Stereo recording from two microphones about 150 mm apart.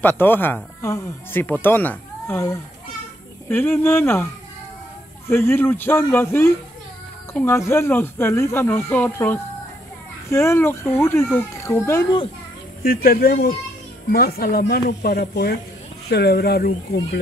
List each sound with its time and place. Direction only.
0.0 s speech: 15° left (ahead or behind)
5.3 s speech: 15° left (ahead or behind)
12.8 s speech: 80° left